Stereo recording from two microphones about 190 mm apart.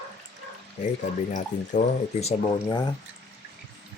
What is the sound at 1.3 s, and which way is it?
Cutlery, 40° left (ahead or behind).